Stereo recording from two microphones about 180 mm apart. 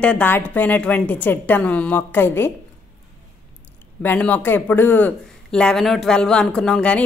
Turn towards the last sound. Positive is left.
turn(degrees=5)  # may be behind; listen again after turning